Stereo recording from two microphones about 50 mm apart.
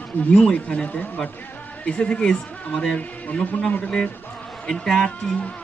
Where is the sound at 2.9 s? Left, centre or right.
Left.